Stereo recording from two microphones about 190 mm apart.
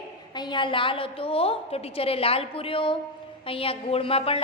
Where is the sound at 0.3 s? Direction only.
25° left (ahead or behind).